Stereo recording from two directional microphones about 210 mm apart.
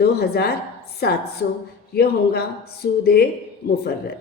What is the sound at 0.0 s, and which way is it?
A woman's voice, 50° left (ahead or behind).